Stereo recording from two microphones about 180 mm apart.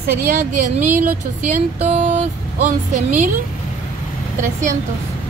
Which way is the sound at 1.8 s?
40° right (ahead or behind).